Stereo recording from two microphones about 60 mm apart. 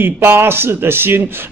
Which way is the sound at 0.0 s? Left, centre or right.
Right.